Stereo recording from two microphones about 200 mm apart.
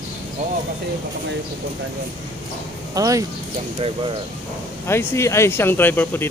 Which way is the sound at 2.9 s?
15° right (ahead or behind).